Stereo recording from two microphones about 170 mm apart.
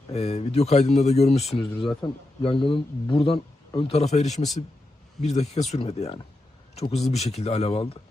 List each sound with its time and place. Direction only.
0.1 s speech: 40° left (ahead or behind)